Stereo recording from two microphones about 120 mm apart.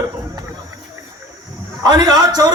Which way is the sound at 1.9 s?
35° right (ahead or behind).